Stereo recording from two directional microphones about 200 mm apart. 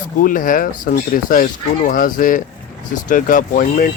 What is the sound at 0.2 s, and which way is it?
Speech, 45° left (ahead or behind).